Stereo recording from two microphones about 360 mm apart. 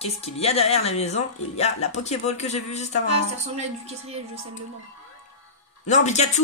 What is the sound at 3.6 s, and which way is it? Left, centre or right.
Speech, centre.